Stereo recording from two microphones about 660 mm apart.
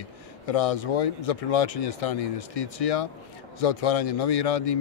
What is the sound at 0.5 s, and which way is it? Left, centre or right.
Speech, left.